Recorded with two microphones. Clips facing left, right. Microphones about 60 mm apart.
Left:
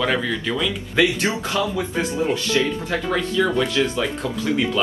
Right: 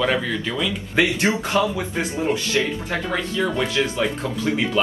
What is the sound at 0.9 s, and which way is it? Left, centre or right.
Speech, right.